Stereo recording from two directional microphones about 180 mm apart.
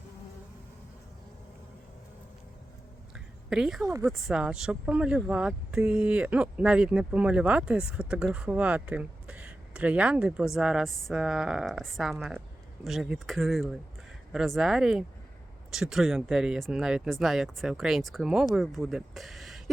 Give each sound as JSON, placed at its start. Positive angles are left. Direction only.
{"t": 3.5, "sound": "speech", "side_deg": 0}
{"t": 3.8, "sound": "speech", "side_deg": -15}
{"t": 4.3, "sound": "speech", "side_deg": -5}